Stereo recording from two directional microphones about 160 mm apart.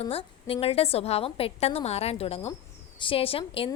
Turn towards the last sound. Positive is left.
turn(degrees=35)  # may be behind; listen again after turning